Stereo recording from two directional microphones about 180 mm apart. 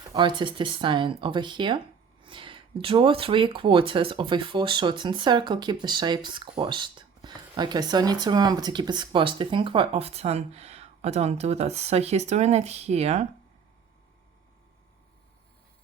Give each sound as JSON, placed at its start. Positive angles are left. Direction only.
{"t": 0.1, "sound": "speech", "side_deg": -25}